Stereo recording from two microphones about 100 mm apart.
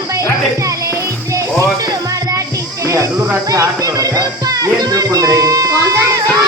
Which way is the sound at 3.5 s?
35° right (ahead or behind).